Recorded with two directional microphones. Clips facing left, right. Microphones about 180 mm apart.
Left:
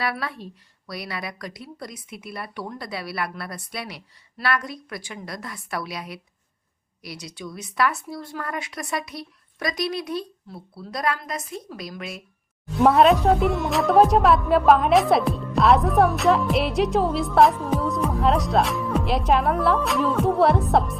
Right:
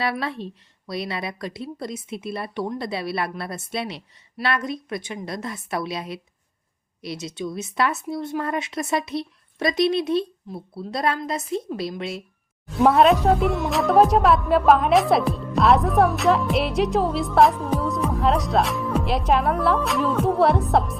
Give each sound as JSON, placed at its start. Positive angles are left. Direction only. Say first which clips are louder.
{"t": 0.0, "sound": "speech", "louder": "right 3 dB", "side_deg": -25}
{"t": 12.8, "sound": "speech", "louder": "even", "side_deg": 0}